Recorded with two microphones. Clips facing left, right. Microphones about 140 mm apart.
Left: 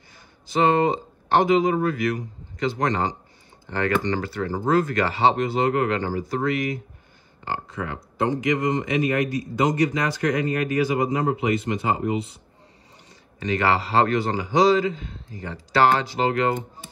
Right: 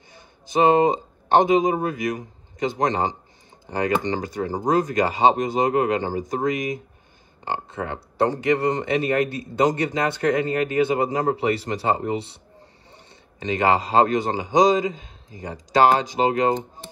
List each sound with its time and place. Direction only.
0.5 s speech: 20° right (ahead or behind)
13.4 s speech: 20° right (ahead or behind)